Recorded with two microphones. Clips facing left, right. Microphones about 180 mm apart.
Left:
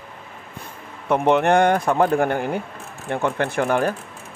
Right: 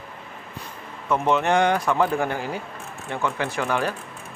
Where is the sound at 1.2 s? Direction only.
60° left (ahead or behind).